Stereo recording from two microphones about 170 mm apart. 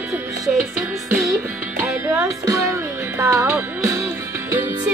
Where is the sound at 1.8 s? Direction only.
15° right (ahead or behind).